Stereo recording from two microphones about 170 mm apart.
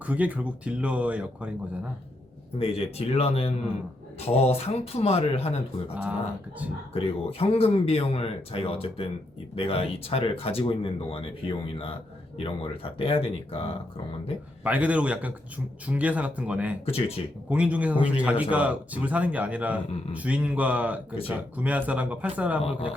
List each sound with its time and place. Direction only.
0.0 s a man's voice: 10° right (ahead or behind)
2.6 s speech: 35° left (ahead or behind)
5.9 s a man's voice: 5° right (ahead or behind)
6.9 s speech: 35° left (ahead or behind)
12.4 s speech: 35° left (ahead or behind)
14.6 s a man's voice: 10° right (ahead or behind)
16.8 s speech: 35° left (ahead or behind)
17.5 s a man's voice: 10° right (ahead or behind)